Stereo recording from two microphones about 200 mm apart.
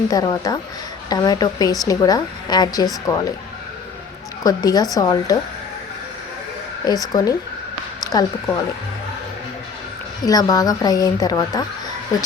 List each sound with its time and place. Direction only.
0.1 s a woman's voice: 20° left (ahead or behind)
4.4 s a woman's voice: 20° left (ahead or behind)
6.8 s a woman's voice: 20° left (ahead or behind)
10.2 s a woman's voice: 20° left (ahead or behind)